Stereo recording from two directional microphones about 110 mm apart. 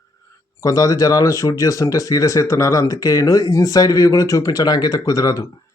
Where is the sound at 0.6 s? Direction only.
35° left (ahead or behind).